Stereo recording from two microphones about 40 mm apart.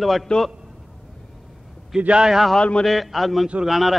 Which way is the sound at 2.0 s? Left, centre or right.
Right.